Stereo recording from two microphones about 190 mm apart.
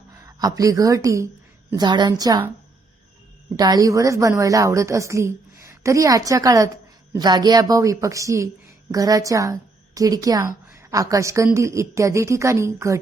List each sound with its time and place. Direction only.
0.1 s a woman's voice: 15° right (ahead or behind)
3.6 s a woman's voice: 20° right (ahead or behind)